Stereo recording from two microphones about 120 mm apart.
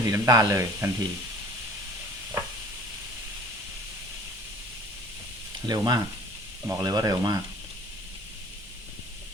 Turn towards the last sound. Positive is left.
turn(degrees=-30)  # may be behind; listen again after turning